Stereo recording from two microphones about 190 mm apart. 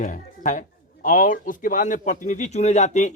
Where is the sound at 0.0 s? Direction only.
40° left (ahead or behind).